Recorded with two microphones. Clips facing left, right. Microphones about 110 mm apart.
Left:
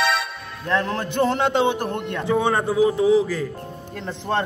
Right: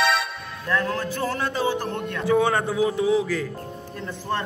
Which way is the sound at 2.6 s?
Centre (ahead or behind).